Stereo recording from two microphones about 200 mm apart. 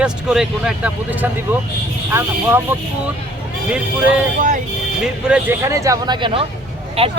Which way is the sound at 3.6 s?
5° right (ahead or behind).